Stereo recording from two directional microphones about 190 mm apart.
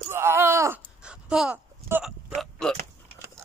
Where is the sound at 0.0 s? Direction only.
10° right (ahead or behind).